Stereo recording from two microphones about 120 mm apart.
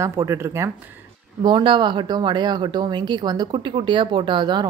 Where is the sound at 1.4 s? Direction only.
45° right (ahead or behind).